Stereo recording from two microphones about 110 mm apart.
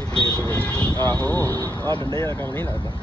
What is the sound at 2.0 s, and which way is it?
Speech, 25° left (ahead or behind).